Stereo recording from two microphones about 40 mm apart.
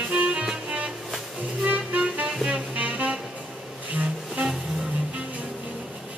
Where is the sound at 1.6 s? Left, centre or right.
Right.